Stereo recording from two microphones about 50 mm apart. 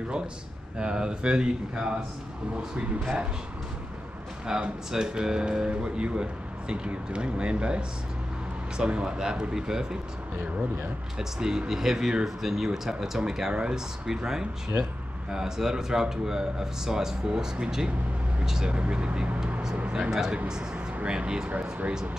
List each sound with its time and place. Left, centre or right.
0.7 s speech: centre
4.5 s speech: centre
11.1 s speech: centre